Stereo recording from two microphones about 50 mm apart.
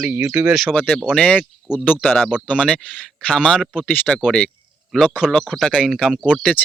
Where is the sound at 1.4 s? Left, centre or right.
Centre.